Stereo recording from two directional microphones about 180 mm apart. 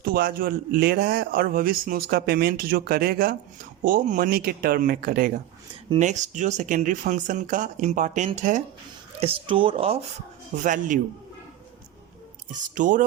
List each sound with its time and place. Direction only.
0.0 s a man's voice: 55° right (ahead or behind)
9.2 s speech: 30° right (ahead or behind)
10.6 s speech: 45° right (ahead or behind)
12.7 s speech: 45° right (ahead or behind)